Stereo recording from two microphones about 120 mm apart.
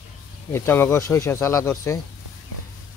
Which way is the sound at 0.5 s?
20° left (ahead or behind).